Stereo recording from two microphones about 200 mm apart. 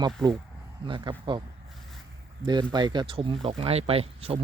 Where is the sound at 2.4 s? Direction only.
20° right (ahead or behind).